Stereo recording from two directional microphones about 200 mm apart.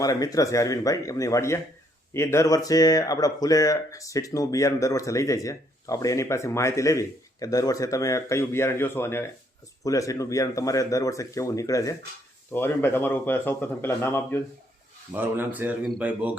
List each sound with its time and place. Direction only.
0.0 s speech: 15° left (ahead or behind)
15.1 s speech: 10° right (ahead or behind)